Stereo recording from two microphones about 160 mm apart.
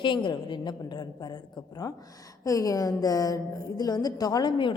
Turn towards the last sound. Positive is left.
turn(degrees=30)  # may be behind; listen again after turning